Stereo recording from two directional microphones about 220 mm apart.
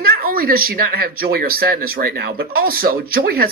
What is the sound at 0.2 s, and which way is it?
Speech, 40° right (ahead or behind).